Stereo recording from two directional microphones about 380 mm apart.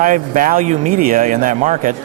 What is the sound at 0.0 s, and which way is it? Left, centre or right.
A man's voice, right.